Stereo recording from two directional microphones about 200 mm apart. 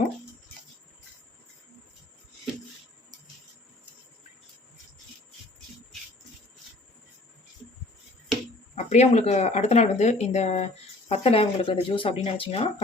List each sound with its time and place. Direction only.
8.7 s speech: 35° left (ahead or behind)